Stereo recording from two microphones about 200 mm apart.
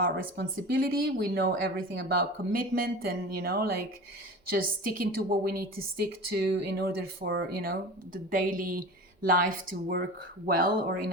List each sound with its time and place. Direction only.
0.0 s speech: 50° right (ahead or behind)